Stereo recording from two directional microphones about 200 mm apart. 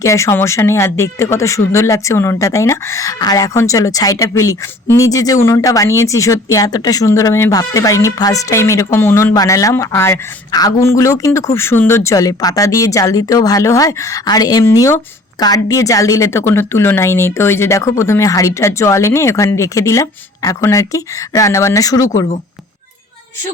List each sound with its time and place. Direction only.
0.0 s speech: 15° left (ahead or behind)